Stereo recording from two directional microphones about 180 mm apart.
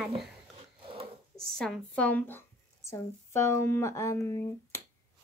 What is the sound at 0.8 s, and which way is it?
Wood, 30° right (ahead or behind).